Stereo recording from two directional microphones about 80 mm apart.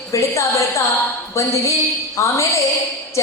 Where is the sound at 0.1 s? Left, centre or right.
Left.